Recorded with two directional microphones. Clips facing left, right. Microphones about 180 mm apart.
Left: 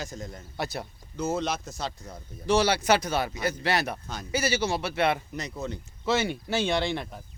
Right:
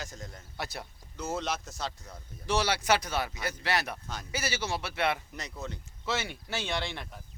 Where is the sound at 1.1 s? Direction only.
5° left (ahead or behind).